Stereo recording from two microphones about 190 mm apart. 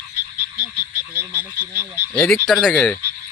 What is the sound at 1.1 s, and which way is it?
Croak, 10° right (ahead or behind).